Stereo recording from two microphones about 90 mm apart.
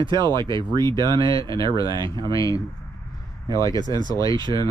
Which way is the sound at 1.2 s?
40° left (ahead or behind).